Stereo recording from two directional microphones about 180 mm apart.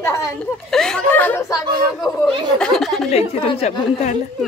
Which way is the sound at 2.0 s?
5° left (ahead or behind).